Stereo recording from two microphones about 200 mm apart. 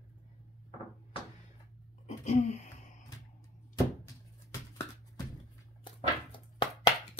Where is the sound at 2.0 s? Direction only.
35° left (ahead or behind).